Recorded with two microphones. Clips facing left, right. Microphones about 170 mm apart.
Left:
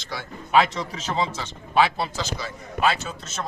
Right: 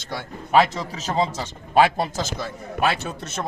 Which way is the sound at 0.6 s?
35° right (ahead or behind).